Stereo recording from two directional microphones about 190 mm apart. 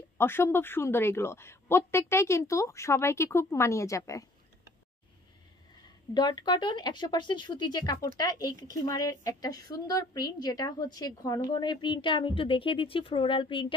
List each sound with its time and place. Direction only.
0.2 s a woman's voice: 10° left (ahead or behind)
6.1 s a woman's voice: 20° left (ahead or behind)